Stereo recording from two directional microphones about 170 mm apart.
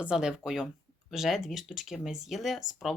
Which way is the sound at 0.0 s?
5° right (ahead or behind).